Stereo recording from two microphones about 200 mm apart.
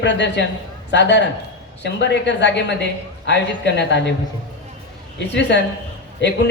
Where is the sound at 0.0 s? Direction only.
60° left (ahead or behind).